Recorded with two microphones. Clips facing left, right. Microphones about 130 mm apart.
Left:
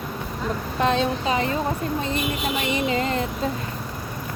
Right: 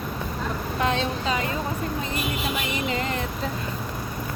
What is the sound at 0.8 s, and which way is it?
Speech, 30° left (ahead or behind).